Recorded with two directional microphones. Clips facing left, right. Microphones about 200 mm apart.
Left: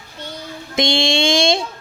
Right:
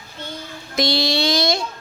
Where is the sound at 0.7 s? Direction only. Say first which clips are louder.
Left 2 dB; 25° left (ahead or behind).